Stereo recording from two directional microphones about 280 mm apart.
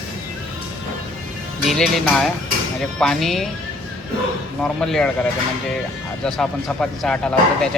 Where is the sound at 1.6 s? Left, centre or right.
Centre.